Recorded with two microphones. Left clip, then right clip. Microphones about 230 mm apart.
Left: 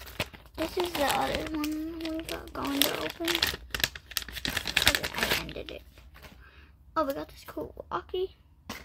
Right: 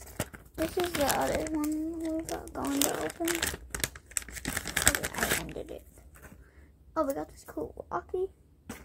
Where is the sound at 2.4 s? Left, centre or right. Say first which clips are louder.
Left 1 dB; left.